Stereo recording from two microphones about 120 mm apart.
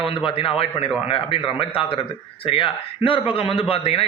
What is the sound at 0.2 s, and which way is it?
A man's voice, 50° left (ahead or behind).